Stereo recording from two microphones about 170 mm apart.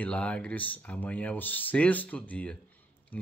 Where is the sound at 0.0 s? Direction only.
5° left (ahead or behind).